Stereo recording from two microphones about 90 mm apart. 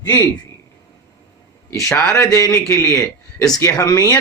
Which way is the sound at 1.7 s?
35° left (ahead or behind).